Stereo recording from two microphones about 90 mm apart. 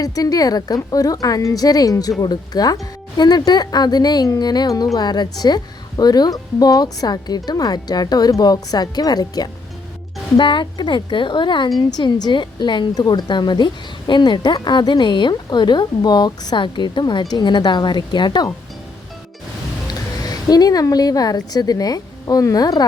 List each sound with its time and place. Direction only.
0.0 s a woman's voice: 45° left (ahead or behind)
10.3 s speech: 60° left (ahead or behind)
11.9 s speech: 50° left (ahead or behind)
19.9 s speech: 45° left (ahead or behind)